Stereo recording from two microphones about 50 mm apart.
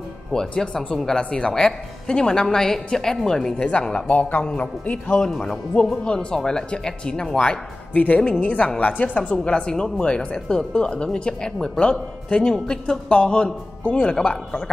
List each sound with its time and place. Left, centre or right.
0.3 s a woman's voice: centre
4.1 s speech: left
5.2 s a woman's voice: centre
7.9 s a woman's voice: left
13.8 s speech: left